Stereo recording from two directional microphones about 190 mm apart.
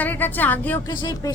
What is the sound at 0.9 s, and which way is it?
Speech, 25° left (ahead or behind).